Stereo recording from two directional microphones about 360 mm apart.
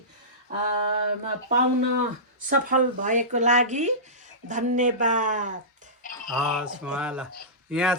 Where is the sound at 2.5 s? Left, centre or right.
Right.